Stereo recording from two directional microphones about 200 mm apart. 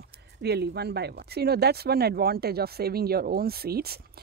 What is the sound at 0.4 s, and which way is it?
Speech, 55° right (ahead or behind).